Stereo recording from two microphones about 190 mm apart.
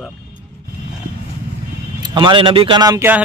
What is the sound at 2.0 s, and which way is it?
Speech, 25° right (ahead or behind).